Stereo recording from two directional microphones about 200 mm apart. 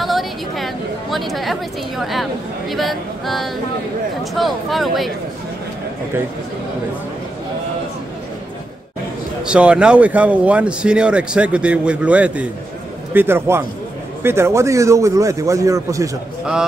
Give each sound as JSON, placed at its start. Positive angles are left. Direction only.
{"t": 0.0, "sound": "a sound", "side_deg": 0}
{"t": 1.1, "sound": "speech", "side_deg": 0}
{"t": 9.5, "sound": "speech", "side_deg": -5}